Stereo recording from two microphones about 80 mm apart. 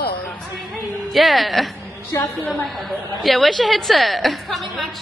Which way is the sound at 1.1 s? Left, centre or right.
Centre.